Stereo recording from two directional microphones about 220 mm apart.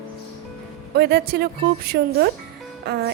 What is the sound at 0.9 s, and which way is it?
A woman's voice, 45° right (ahead or behind).